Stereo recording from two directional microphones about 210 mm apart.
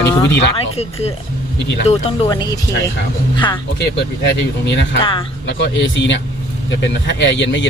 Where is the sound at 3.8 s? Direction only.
55° left (ahead or behind).